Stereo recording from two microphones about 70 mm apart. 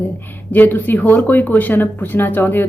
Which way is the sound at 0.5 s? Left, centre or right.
Left.